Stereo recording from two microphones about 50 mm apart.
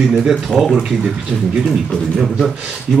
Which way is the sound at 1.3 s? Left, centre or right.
Right.